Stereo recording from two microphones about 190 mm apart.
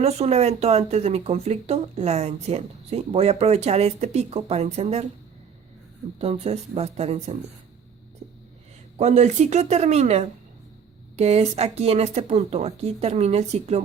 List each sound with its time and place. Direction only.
0.0 s speech: 35° right (ahead or behind)
6.1 s speech: 35° right (ahead or behind)
9.0 s speech: 35° right (ahead or behind)